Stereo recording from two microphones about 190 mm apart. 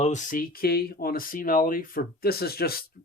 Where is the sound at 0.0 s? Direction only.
40° left (ahead or behind).